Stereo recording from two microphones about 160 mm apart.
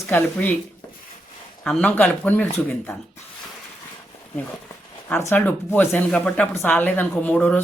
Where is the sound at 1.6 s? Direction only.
5° left (ahead or behind).